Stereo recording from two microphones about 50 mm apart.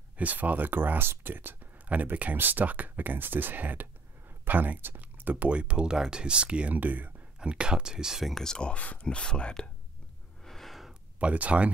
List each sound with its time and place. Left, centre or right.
0.2 s speech: right
1.9 s speech: right
7.3 s speech: centre
8.3 s speech: centre
8.7 s speech: left
10.4 s a sound: centre
11.1 s speech: right